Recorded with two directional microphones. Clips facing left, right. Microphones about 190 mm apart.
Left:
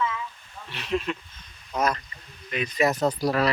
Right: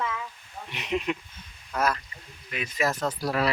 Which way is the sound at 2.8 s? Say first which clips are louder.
Left 5 dB; 20° left (ahead or behind).